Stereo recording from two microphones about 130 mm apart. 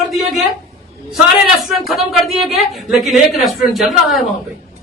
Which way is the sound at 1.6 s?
Centre (ahead or behind).